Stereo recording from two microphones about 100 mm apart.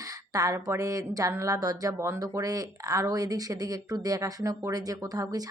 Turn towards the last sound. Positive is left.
turn(degrees=-40)  # may be behind; listen again after turning